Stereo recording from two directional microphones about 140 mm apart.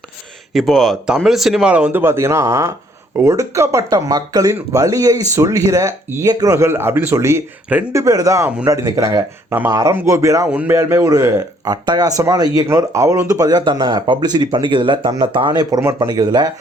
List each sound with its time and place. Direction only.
0.5 s speech: centre (ahead or behind)
8.0 s speech: 25° right (ahead or behind)
10.5 s speech: 10° right (ahead or behind)
10.8 s speech: 20° right (ahead or behind)